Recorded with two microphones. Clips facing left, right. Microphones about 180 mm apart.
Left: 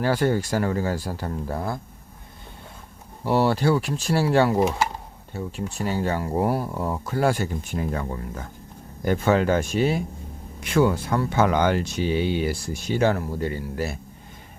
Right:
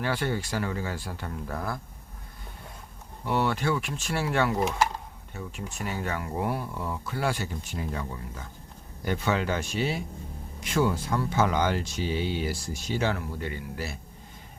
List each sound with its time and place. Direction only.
0.0 s speech: 40° left (ahead or behind)
3.2 s speech: 35° left (ahead or behind)
10.6 s speech: 65° left (ahead or behind); by 13.9 s 40° left (ahead or behind)